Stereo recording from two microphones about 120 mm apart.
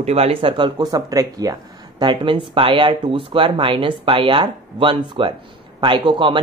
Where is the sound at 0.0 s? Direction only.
60° right (ahead or behind).